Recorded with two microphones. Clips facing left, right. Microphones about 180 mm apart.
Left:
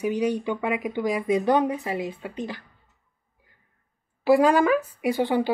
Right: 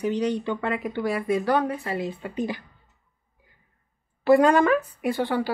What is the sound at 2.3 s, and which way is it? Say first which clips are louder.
Speech: right 4 dB; 15° right (ahead or behind).